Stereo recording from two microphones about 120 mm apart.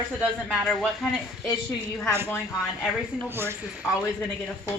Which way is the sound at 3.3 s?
20° right (ahead or behind).